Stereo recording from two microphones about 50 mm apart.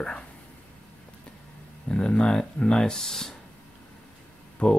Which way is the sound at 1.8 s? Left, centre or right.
Centre.